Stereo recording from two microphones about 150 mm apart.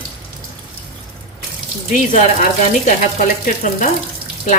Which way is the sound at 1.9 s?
60° left (ahead or behind).